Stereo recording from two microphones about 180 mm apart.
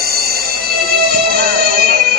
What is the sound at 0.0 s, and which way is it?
Music, 55° right (ahead or behind).